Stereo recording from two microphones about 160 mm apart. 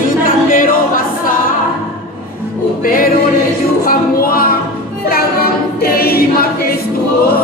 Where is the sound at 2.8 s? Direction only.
65° left (ahead or behind).